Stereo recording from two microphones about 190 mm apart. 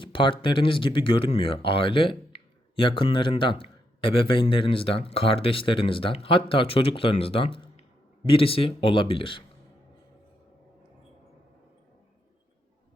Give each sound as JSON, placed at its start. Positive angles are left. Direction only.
{"t": 0.0, "sound": "speech", "side_deg": 25}